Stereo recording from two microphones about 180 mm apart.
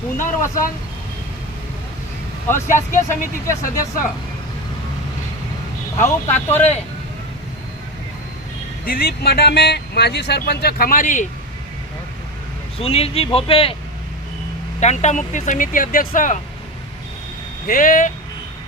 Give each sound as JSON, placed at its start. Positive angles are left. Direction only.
{"t": 0.2, "sound": "speech", "side_deg": 15}
{"t": 2.5, "sound": "speech", "side_deg": 15}
{"t": 6.0, "sound": "speech", "side_deg": 15}
{"t": 8.8, "sound": "speech", "side_deg": 55}
{"t": 12.8, "sound": "speech", "side_deg": 35}
{"t": 14.8, "sound": "speech", "side_deg": 40}
{"t": 17.7, "sound": "speech", "side_deg": 50}